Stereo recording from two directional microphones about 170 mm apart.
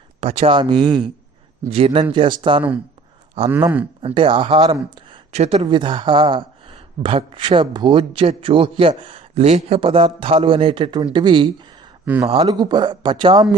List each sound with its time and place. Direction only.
0.2 s speech: 35° right (ahead or behind)
4.0 s speech: 30° right (ahead or behind)
5.3 s speech: 40° right (ahead or behind)
5.6 s speech: 25° right (ahead or behind)
12.0 s speech: 10° right (ahead or behind)
12.5 s speech: 25° right (ahead or behind)